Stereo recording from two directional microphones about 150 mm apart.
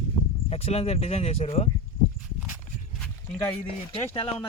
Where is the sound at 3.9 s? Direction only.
35° left (ahead or behind).